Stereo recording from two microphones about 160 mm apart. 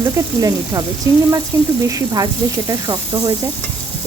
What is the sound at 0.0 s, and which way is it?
Speech, 25° right (ahead or behind).